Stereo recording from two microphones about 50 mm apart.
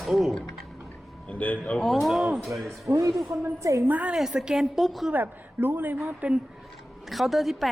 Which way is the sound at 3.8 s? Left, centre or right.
Right.